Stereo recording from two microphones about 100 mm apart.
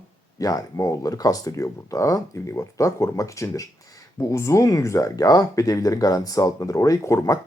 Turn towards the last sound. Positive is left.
turn(degrees=35)  # may be behind; listen again after turning